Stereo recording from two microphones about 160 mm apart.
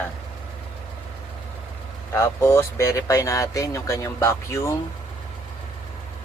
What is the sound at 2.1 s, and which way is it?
Speech, 15° left (ahead or behind).